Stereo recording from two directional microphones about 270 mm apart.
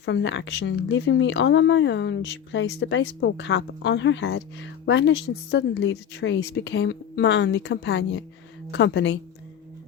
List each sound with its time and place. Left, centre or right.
0.0 s a woman's voice: left